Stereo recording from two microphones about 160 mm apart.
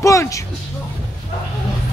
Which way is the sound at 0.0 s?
20° left (ahead or behind).